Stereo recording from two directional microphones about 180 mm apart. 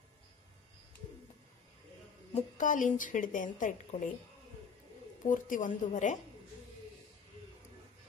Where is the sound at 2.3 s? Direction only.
45° left (ahead or behind).